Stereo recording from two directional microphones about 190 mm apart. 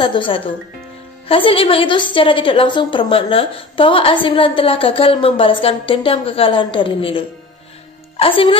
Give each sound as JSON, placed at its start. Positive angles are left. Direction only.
{"t": 0.0, "sound": "a woman's voice", "side_deg": 25}